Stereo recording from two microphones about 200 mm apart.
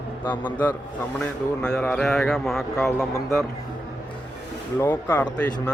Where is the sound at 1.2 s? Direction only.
5° left (ahead or behind).